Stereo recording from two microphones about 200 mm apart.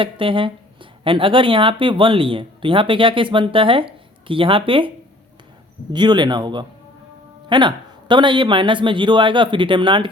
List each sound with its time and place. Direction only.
0.0 s speech: 25° right (ahead or behind)
5.9 s speech: 20° right (ahead or behind)